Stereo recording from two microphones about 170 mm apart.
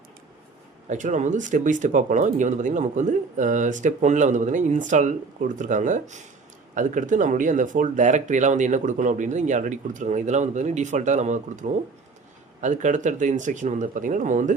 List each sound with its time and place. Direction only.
0.9 s speech: 45° right (ahead or behind)